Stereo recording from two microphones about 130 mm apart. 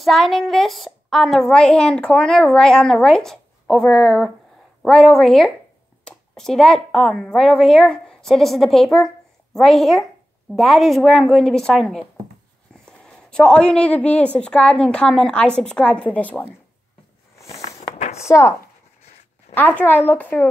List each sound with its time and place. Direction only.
0.0 s a woman's voice: centre (ahead or behind)
13.0 s a woman's voice: 5° left (ahead or behind)
17.5 s walk: 55° left (ahead or behind)
19.5 s a woman's voice: 15° left (ahead or behind)